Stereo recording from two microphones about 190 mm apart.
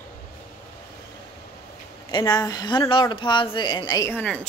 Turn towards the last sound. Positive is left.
turn(degrees=10)  # may be behind; listen again after turning